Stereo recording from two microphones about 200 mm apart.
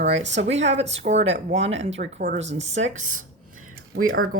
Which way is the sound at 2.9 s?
40° right (ahead or behind).